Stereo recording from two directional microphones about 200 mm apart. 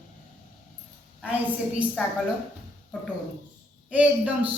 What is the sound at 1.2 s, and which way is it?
Speech, 5° right (ahead or behind).